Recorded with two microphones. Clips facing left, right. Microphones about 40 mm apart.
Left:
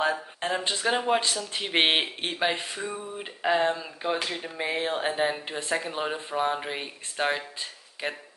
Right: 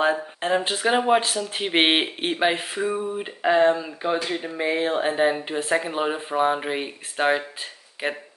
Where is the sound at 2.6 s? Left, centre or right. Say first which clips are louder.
Right 8 dB; right.